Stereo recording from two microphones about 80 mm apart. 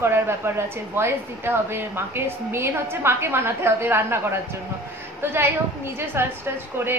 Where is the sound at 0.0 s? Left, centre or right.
Right.